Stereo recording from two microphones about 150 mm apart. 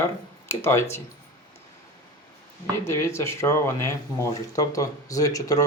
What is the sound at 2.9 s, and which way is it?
Speech, 15° left (ahead or behind).